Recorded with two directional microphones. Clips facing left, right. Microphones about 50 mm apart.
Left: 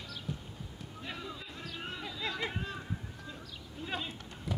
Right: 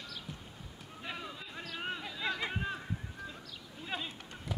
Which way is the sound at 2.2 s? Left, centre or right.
Right.